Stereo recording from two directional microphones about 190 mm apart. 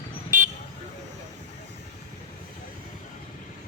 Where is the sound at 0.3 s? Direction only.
40° right (ahead or behind).